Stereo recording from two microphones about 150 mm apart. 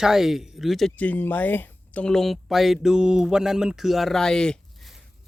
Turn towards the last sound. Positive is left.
turn(degrees=5)  # may be behind; listen again after turning